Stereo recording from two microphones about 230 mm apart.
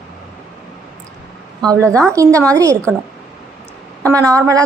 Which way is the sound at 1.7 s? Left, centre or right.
Centre.